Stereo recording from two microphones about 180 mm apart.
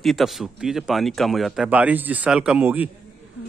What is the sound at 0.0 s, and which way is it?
A man's voice, centre (ahead or behind).